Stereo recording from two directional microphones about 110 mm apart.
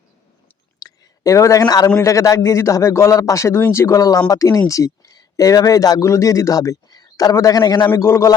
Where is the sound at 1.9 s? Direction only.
30° left (ahead or behind).